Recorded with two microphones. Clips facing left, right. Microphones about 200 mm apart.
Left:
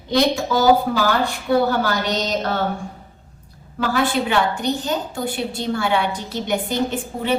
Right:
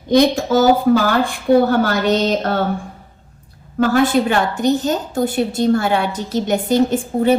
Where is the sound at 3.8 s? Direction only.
45° right (ahead or behind).